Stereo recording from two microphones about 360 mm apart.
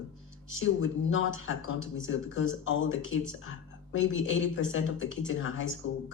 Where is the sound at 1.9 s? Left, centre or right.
Left.